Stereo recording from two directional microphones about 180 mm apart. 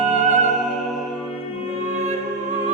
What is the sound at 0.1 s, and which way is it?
Music, 40° right (ahead or behind).